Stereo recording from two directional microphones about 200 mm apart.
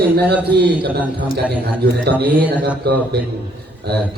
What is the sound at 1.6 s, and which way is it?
A man's voice, 55° right (ahead or behind).